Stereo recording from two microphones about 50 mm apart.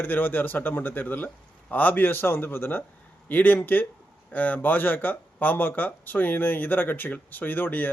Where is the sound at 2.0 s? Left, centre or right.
Left.